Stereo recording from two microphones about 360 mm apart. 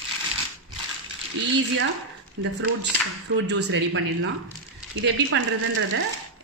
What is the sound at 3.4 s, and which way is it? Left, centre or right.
Speech, right.